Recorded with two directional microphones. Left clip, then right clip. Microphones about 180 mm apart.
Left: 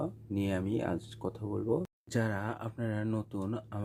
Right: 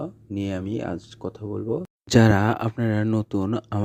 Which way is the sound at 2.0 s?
45° right (ahead or behind).